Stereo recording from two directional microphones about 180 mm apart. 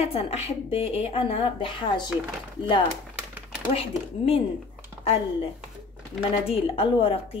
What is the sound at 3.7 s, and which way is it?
Speech, 30° left (ahead or behind).